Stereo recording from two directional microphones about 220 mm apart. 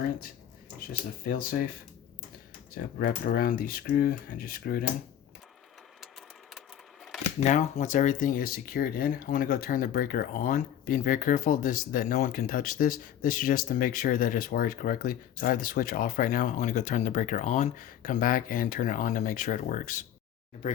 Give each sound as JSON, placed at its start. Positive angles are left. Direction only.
{"t": 1.2, "sound": "speech", "side_deg": 40}
{"t": 2.7, "sound": "speech", "side_deg": 45}
{"t": 7.4, "sound": "speech", "side_deg": 30}